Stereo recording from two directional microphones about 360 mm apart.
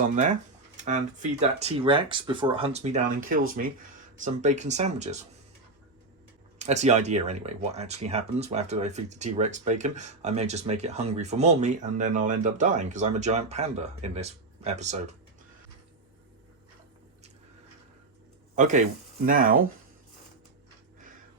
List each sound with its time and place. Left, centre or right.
0.8 s speech: centre
6.6 s speech: centre
18.5 s speech: centre